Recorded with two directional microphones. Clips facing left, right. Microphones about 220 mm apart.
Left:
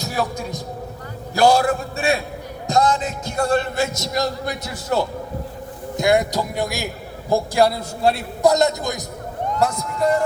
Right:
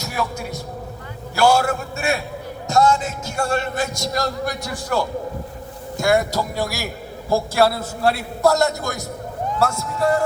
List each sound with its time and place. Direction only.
0.0 s speech: 35° left (ahead or behind)
3.9 s a man's voice: 20° left (ahead or behind)